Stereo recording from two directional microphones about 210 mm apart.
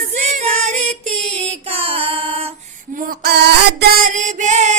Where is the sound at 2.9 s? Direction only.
40° right (ahead or behind).